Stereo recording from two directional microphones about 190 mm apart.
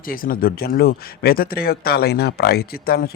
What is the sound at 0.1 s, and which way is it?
Speech, 50° left (ahead or behind).